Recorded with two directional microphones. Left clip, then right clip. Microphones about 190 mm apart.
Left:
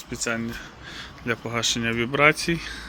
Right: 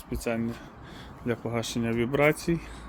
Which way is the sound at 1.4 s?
10° right (ahead or behind).